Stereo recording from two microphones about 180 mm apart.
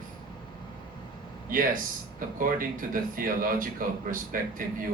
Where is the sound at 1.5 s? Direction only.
50° right (ahead or behind).